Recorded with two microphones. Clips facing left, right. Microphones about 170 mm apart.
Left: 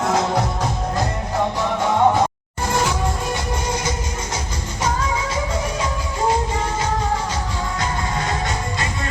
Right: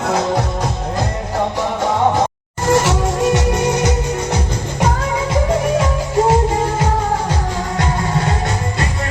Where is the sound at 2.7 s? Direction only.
85° right.